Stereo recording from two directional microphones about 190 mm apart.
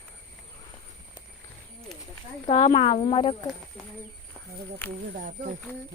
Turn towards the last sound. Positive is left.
turn(degrees=-45)  # may be behind; listen again after turning